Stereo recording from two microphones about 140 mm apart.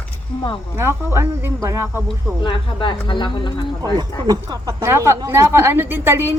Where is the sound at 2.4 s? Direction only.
35° left (ahead or behind).